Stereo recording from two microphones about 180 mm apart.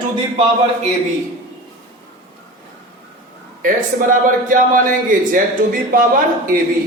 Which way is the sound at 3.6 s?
50° right (ahead or behind).